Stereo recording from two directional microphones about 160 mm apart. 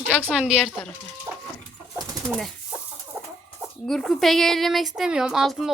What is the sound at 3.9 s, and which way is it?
Speech, 5° left (ahead or behind).